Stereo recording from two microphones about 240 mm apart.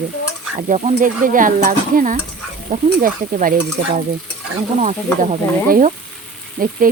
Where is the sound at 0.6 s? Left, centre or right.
Right.